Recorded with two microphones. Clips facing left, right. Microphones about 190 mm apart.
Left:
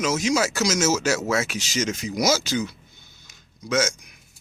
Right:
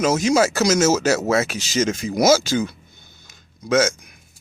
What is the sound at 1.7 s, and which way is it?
Speech, 50° right (ahead or behind).